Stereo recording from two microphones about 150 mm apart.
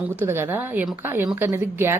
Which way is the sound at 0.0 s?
15° right (ahead or behind).